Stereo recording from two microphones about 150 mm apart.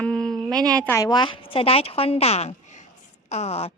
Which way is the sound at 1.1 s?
30° left (ahead or behind).